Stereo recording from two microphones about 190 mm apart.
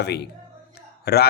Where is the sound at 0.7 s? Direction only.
55° left (ahead or behind).